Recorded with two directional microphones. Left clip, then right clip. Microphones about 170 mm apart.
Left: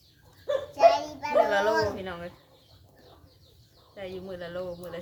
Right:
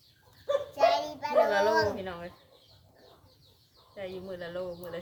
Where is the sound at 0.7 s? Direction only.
20° right (ahead or behind).